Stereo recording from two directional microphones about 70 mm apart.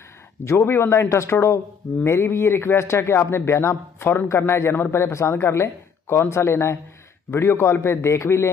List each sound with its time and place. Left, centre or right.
0.5 s a man's voice: left